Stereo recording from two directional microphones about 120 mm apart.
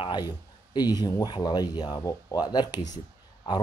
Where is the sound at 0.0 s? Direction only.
40° left (ahead or behind).